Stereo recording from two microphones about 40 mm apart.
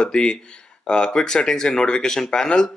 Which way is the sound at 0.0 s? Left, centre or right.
Left.